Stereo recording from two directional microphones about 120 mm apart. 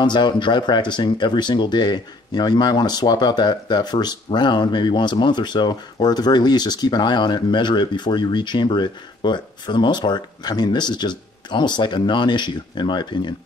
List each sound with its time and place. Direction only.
0.0 s speech: 40° left (ahead or behind)